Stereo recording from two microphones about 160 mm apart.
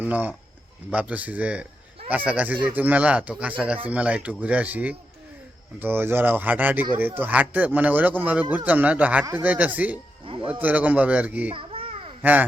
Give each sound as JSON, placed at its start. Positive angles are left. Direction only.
{"t": 0.0, "sound": "speech", "side_deg": -10}
{"t": 10.2, "sound": "speech", "side_deg": -30}
{"t": 10.6, "sound": "speech", "side_deg": -10}
{"t": 11.5, "sound": "babbling", "side_deg": -35}
{"t": 12.2, "sound": "speech", "side_deg": -10}